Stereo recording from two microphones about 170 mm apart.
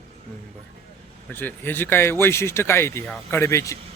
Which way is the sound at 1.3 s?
10° left (ahead or behind).